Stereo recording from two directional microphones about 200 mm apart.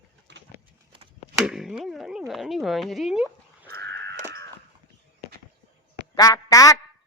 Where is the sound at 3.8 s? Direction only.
60° right (ahead or behind).